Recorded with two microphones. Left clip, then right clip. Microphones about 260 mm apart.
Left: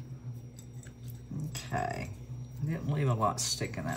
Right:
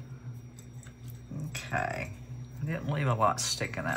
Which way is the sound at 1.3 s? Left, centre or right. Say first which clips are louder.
Right 3 dB; centre.